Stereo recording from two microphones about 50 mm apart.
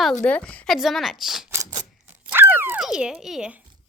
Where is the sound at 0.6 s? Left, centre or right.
Centre.